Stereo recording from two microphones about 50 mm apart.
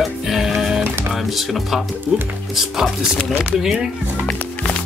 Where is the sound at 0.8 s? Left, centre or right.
Right.